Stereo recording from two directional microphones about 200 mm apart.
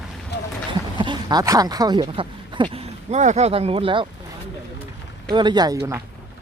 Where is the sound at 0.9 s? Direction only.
25° right (ahead or behind).